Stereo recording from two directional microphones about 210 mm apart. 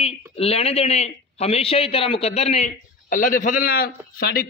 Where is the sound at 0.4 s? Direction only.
30° left (ahead or behind).